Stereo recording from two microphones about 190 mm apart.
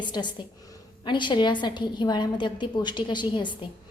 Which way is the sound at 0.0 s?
25° left (ahead or behind).